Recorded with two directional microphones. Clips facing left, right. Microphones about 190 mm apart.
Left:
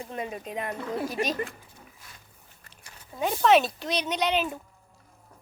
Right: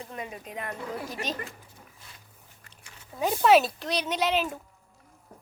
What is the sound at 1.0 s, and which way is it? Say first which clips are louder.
Speech: left 5 dB; 10° left (ahead or behind).